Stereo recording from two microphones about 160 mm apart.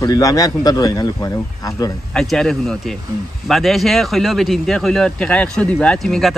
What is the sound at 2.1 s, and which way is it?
Speech, centre (ahead or behind).